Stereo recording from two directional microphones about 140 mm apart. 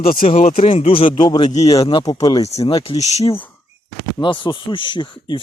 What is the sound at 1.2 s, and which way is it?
Speech, 30° left (ahead or behind).